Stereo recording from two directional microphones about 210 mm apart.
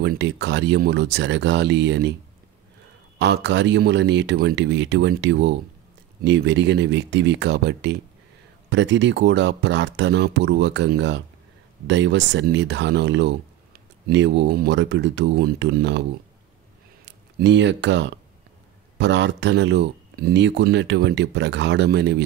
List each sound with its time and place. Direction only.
0.0 s speech: 55° right (ahead or behind)
3.2 s speech: 55° right (ahead or behind)
17.0 s speech: 55° right (ahead or behind)